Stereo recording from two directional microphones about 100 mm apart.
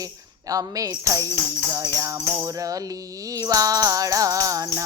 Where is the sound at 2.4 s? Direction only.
35° right (ahead or behind).